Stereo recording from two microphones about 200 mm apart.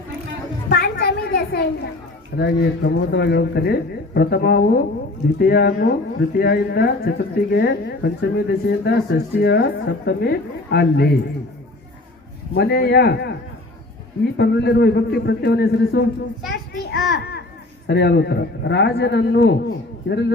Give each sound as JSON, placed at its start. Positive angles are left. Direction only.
{"t": 0.7, "sound": "a sound", "side_deg": 50}
{"t": 2.4, "sound": "a woman's voice", "side_deg": 55}
{"t": 12.5, "sound": "a woman's voice", "side_deg": 50}
{"t": 14.3, "sound": "a man's voice", "side_deg": 55}